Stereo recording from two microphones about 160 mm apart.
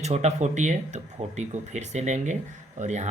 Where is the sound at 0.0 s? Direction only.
45° right (ahead or behind).